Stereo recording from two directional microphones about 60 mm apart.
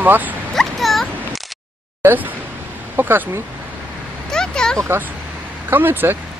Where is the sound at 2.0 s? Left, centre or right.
Right.